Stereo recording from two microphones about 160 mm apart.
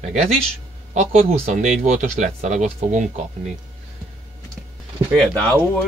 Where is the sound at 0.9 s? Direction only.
40° right (ahead or behind).